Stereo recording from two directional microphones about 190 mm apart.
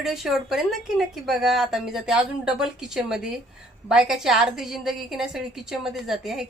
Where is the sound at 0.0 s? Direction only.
Centre (ahead or behind).